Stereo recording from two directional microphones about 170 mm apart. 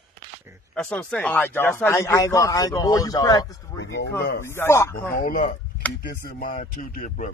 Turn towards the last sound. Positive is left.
turn(degrees=50)  # may be behind; listen again after turning